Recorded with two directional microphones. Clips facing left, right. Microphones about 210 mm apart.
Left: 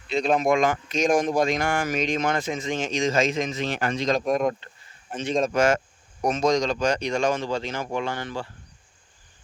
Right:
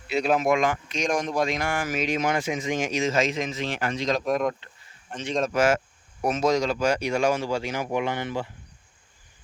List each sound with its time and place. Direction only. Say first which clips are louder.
0.1 s a man's voice: left 1 dB; 5° right (ahead or behind)
0.6 s speech: left 3 dB; 45° left (ahead or behind)
1.6 s a man's voice: left 2 dB; centre (ahead or behind)
3.6 s speech: left 2 dB; 45° left (ahead or behind)
4.1 s a man's voice: left 2 dB; centre (ahead or behind); by 8.5 s 20° right (ahead or behind)